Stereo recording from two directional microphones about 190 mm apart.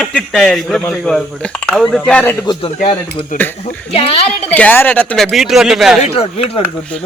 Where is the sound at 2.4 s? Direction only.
20° left (ahead or behind).